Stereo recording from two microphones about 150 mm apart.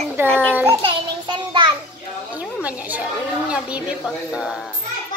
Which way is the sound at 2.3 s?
10° right (ahead or behind).